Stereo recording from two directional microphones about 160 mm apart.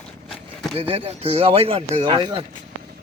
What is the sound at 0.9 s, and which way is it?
Speech, 35° right (ahead or behind).